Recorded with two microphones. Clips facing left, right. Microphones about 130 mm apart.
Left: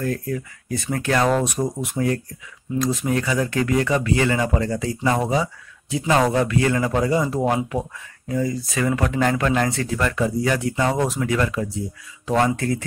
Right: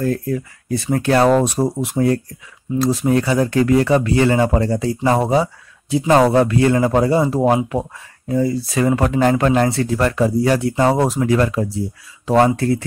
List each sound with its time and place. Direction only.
0.0 s speech: 30° right (ahead or behind)